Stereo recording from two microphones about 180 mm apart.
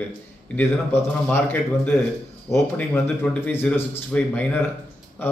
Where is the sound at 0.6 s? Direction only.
10° left (ahead or behind).